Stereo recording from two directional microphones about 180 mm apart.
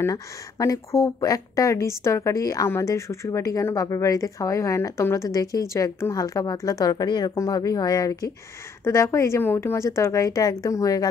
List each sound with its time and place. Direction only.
0.0 s speech: 15° left (ahead or behind)